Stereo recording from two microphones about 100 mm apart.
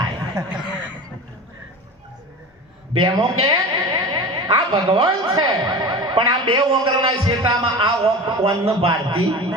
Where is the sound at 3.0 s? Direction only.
60° right (ahead or behind).